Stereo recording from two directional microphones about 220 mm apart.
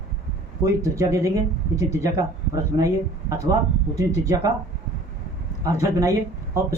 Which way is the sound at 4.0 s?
15° right (ahead or behind).